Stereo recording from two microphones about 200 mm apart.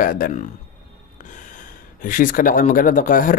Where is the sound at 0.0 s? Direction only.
45° left (ahead or behind).